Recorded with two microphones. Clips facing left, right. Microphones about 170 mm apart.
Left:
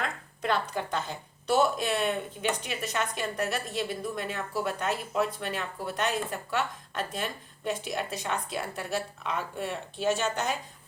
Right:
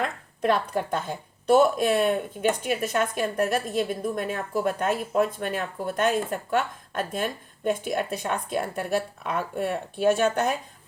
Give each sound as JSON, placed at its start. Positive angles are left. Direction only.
{"t": 0.4, "sound": "speech", "side_deg": -50}